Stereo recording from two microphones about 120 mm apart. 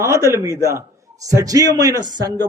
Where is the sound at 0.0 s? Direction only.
25° right (ahead or behind).